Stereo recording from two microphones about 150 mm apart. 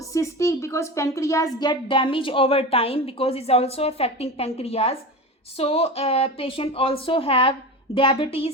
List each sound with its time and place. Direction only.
0.1 s a woman's voice: 20° left (ahead or behind); by 8.4 s 35° left (ahead or behind)